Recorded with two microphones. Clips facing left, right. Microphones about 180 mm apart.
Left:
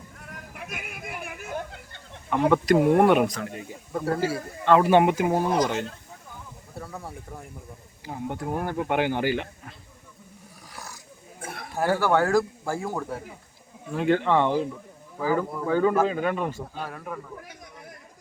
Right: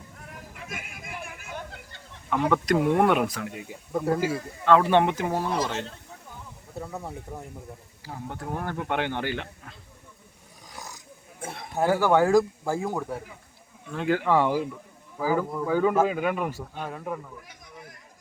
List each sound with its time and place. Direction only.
0.5 s a sound: 60° left (ahead or behind)
2.3 s speech: centre (ahead or behind); by 4.3 s 15° right (ahead or behind)
4.6 s speech: 5° left (ahead or behind)
6.8 s speech: 20° right (ahead or behind)
8.0 s speech: 20° left (ahead or behind)
10.8 s roaring cats: 20° right (ahead or behind)
11.9 s speech: 15° right (ahead or behind)
13.9 s speech: centre (ahead or behind); by 17.2 s 20° right (ahead or behind)